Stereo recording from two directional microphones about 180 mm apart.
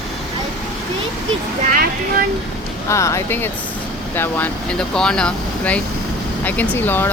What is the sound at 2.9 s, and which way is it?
Speech, 15° left (ahead or behind).